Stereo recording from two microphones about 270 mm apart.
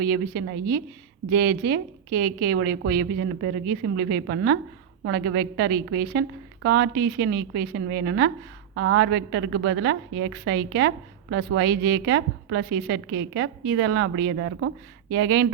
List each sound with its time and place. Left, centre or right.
0.0 s a woman's voice: right